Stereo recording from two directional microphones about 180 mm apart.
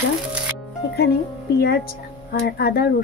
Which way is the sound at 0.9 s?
65° left (ahead or behind).